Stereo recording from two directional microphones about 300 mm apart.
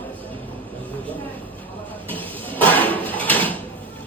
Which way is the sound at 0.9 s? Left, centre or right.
Centre.